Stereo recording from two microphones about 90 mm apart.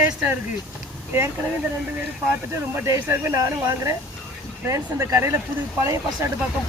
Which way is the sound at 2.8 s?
30° right (ahead or behind).